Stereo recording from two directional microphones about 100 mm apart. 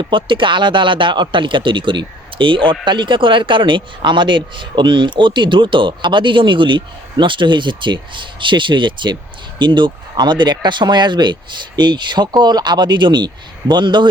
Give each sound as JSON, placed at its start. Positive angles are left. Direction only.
{"t": 0.0, "sound": "speech", "side_deg": -60}